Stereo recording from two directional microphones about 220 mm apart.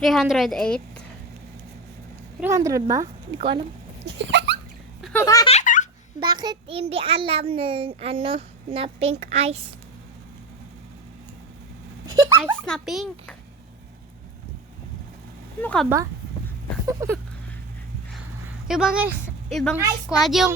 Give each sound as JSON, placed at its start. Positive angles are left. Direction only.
{"t": 0.0, "sound": "a woman's voice", "side_deg": 0}
{"t": 2.4, "sound": "a woman's voice", "side_deg": -15}
{"t": 4.0, "sound": "dog", "side_deg": -55}
{"t": 5.2, "sound": "giggle", "side_deg": 15}
{"t": 5.5, "sound": "a sound", "side_deg": 35}
{"t": 6.1, "sound": "a child's voice", "side_deg": -20}
{"t": 12.4, "sound": "a woman's voice", "side_deg": 0}
{"t": 15.6, "sound": "a woman's voice", "side_deg": 5}
{"t": 16.8, "sound": "a woman's voice", "side_deg": -15}
{"t": 18.7, "sound": "a woman's voice", "side_deg": -5}